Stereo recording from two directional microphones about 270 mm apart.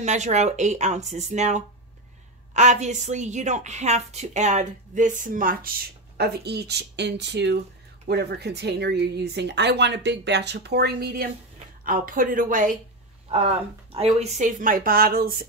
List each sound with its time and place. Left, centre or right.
0.0 s a woman's voice: right